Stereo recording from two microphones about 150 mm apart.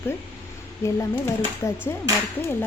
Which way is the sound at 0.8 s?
20° left (ahead or behind).